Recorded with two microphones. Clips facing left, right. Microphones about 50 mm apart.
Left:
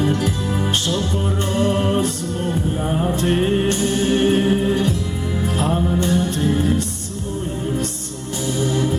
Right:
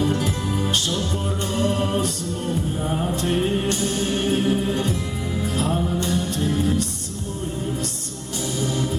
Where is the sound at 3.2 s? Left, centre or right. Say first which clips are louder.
Left 4 dB; left.